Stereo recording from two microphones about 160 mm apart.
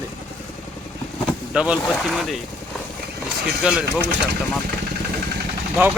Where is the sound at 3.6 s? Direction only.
5° right (ahead or behind).